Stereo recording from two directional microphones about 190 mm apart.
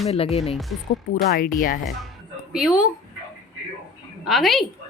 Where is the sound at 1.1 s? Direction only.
50° left (ahead or behind).